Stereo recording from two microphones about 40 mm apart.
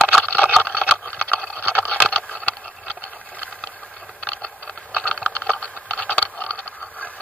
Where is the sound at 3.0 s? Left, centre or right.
Left.